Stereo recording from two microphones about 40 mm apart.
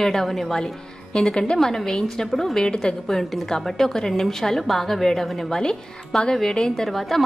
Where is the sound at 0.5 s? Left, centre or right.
Centre.